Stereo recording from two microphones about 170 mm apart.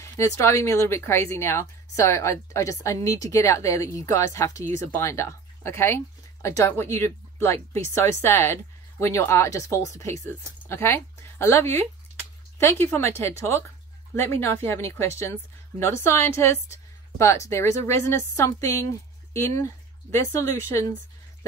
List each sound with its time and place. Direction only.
0.0 s speech: 15° left (ahead or behind)